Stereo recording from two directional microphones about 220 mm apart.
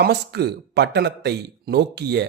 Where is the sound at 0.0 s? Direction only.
50° right (ahead or behind).